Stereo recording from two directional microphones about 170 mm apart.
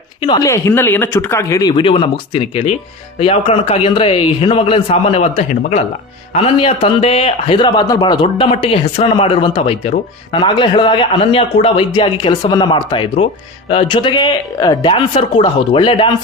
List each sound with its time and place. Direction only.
0.2 s a man's voice: 25° left (ahead or behind)